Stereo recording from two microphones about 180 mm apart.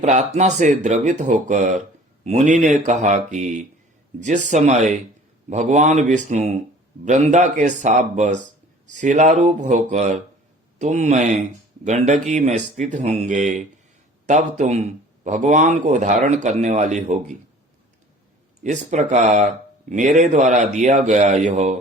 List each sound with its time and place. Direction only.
0.0 s a man's voice: 40° right (ahead or behind)
18.6 s a man's voice: 40° right (ahead or behind)